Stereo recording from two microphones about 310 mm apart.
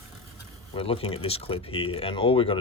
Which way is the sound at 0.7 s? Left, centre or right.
Centre.